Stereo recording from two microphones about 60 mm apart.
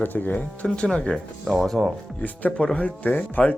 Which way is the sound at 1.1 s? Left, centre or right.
Centre.